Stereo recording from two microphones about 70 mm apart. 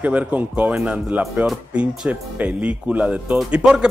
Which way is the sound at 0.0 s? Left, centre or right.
Right.